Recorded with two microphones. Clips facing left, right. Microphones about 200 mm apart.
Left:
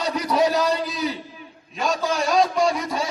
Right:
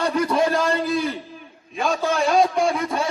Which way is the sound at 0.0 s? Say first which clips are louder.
Right 1 dB; 50° right (ahead or behind).